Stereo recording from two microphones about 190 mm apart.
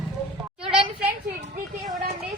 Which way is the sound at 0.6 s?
30° right (ahead or behind).